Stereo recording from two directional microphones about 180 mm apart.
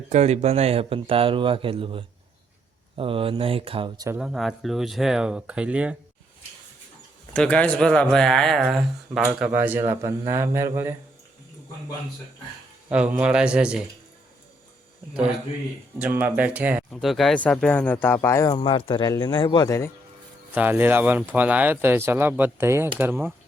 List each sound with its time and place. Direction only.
0.1 s speech: 35° right (ahead or behind); by 4.2 s 20° right (ahead or behind)
4.2 s speech: centre (ahead or behind)
7.3 s speech: 5° left (ahead or behind); by 10.9 s 15° right (ahead or behind)
12.9 s speech: 5° right (ahead or behind)
16.0 s speech: 10° right (ahead or behind); by 18.5 s 15° left (ahead or behind)
18.5 s speech: 30° left (ahead or behind)
20.5 s speech: 10° right (ahead or behind)